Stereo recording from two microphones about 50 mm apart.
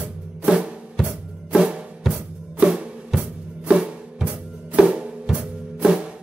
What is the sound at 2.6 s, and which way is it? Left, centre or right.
Music, centre.